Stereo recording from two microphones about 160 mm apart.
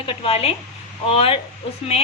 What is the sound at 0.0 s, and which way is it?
A woman's voice, 35° left (ahead or behind).